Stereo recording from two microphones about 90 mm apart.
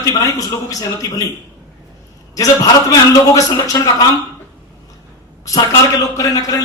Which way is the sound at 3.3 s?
40° left (ahead or behind).